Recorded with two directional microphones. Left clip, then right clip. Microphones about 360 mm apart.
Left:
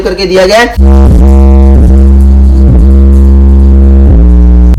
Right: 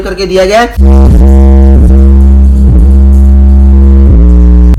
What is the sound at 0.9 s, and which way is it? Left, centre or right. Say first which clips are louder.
Music: left 1 dB; centre.